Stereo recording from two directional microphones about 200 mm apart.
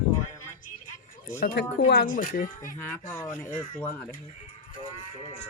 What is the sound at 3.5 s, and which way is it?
Speech, 40° left (ahead or behind).